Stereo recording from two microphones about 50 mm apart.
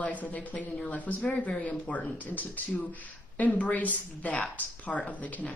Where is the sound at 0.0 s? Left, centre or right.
Left.